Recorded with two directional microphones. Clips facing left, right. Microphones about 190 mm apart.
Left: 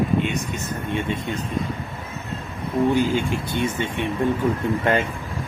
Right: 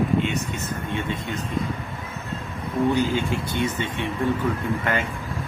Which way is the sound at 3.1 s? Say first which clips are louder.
Left 2 dB; 15° left (ahead or behind).